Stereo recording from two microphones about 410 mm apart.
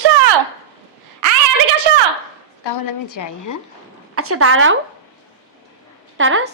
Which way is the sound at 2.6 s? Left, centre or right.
Left.